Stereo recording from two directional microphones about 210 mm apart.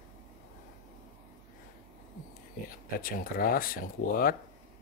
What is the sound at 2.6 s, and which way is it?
Speech, 45° left (ahead or behind).